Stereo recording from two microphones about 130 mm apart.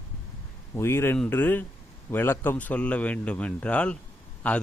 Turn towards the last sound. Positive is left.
turn(degrees=10)  # may be behind; listen again after turning